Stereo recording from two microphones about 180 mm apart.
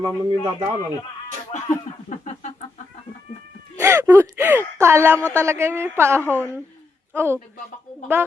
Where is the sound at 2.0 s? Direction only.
45° left (ahead or behind).